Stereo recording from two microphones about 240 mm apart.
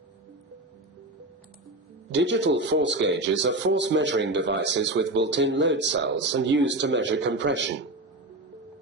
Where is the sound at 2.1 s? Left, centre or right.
Right.